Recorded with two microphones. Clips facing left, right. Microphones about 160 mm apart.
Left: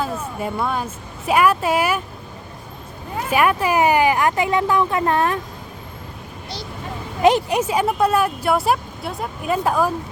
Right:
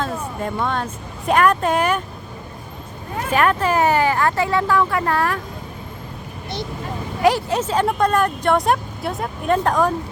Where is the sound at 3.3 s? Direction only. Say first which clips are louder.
Even; 10° left (ahead or behind).